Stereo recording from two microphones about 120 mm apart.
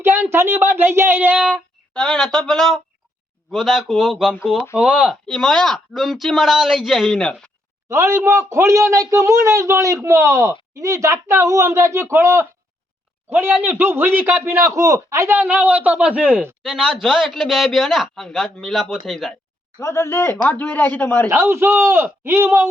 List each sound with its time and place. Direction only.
0.0 s a man's voice: 20° right (ahead or behind)
1.9 s a man's voice: 5° left (ahead or behind); by 5.1 s 10° right (ahead or behind)
5.2 s speech: 5° left (ahead or behind)
7.9 s a man's voice: 20° right (ahead or behind)
16.6 s speech: centre (ahead or behind)
19.8 s a man's voice: 25° left (ahead or behind)
21.2 s a man's voice: 20° right (ahead or behind)